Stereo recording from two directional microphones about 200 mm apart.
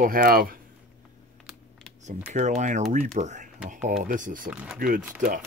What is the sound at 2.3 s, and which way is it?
Speech, 35° right (ahead or behind).